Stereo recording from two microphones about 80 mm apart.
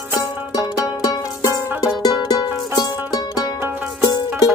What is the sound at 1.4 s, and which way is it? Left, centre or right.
Music, left.